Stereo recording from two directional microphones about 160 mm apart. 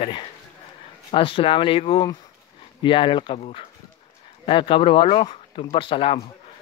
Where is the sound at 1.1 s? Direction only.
35° left (ahead or behind).